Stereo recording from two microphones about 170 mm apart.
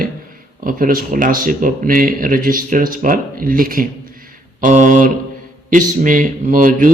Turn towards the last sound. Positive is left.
turn(degrees=-55)  # may be behind; listen again after turning